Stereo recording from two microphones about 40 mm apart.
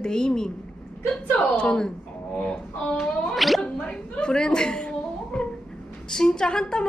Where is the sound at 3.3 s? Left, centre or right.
Centre.